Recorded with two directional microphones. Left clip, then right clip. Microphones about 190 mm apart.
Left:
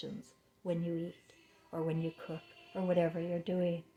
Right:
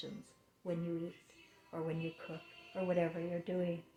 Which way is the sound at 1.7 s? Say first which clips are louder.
Left 4 dB; 55° left (ahead or behind).